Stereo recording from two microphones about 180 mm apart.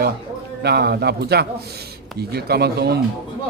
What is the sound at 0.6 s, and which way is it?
Speech, 65° right (ahead or behind).